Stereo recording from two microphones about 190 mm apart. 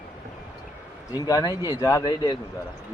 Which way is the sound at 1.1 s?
20° left (ahead or behind).